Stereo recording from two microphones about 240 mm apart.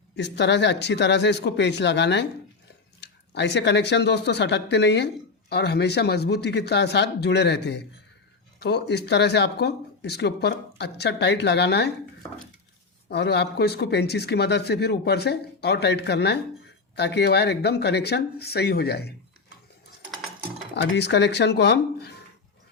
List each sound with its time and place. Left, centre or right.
0.2 s speech: left
13.1 s speech: left
20.9 s speech: left